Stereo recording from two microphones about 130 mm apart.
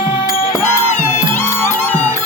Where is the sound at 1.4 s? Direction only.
20° left (ahead or behind).